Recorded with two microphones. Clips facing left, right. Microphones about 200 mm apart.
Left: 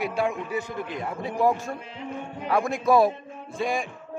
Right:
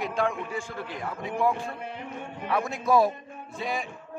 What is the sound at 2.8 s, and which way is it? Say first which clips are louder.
Speech: left 2 dB; 65° left (ahead or behind).